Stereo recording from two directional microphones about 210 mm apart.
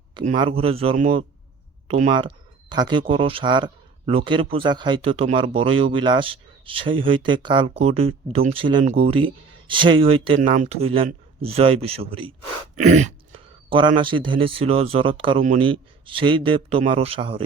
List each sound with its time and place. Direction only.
0.3 s speech: 25° right (ahead or behind)
12.7 s throat clearing: 35° right (ahead or behind)
13.7 s speech: 25° right (ahead or behind)